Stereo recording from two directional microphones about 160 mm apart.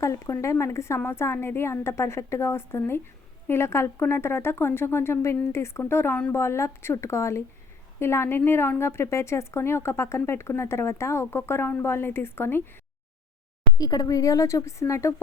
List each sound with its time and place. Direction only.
0.0 s a woman's voice: 20° left (ahead or behind)
13.7 s speech: 20° left (ahead or behind)